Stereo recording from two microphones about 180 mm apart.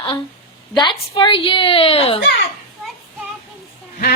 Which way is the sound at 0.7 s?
25° left (ahead or behind).